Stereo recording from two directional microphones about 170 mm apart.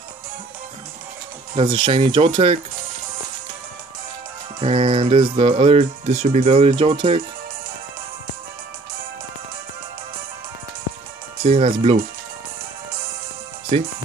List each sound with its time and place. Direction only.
1.5 s speech: 30° right (ahead or behind)
4.6 s speech: 30° right (ahead or behind)
11.4 s speech: 35° right (ahead or behind)